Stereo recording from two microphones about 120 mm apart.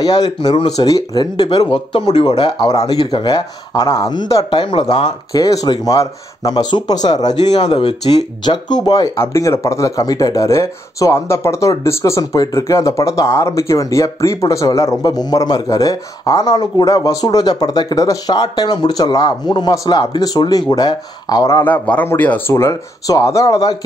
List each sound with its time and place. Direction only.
0.0 s speech: 35° left (ahead or behind)
5.3 s speech: 30° left (ahead or behind)
7.5 s speech: 55° left (ahead or behind); by 9.1 s 35° left (ahead or behind)
9.1 s speech: 20° left (ahead or behind)
21.6 s speech: 15° left (ahead or behind); by 23.8 s 30° left (ahead or behind)